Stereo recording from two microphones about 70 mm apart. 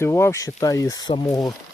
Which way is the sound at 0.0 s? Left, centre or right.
Left.